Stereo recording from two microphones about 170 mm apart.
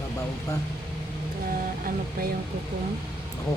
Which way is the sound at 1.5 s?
60° right (ahead or behind).